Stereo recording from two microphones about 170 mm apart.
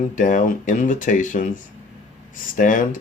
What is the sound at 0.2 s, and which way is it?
Speech, 50° left (ahead or behind).